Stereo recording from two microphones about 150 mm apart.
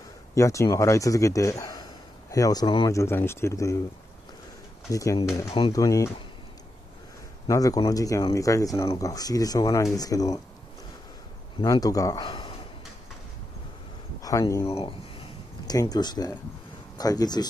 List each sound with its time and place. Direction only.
0.3 s speech: 20° left (ahead or behind)
4.9 s speech: 20° left (ahead or behind)
7.4 s speech: 25° left (ahead or behind)
11.6 s speech: 25° left (ahead or behind)
12.3 s a sound: 35° left (ahead or behind)
14.2 s speech: 20° left (ahead or behind)